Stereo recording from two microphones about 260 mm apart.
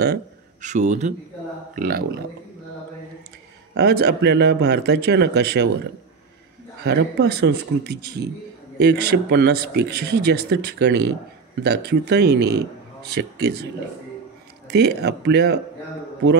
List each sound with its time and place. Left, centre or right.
0.0 s speech: right
3.7 s speech: right
6.8 s speech: right
14.7 s speech: right